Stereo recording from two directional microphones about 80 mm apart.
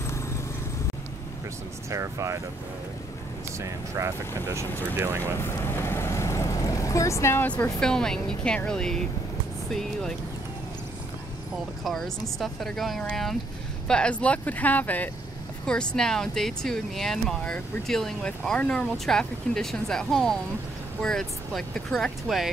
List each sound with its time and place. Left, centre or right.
1.9 s speech: right
3.5 s speech: right
5.4 s vehicle: left
7.8 s speech: centre
11.8 s speech: centre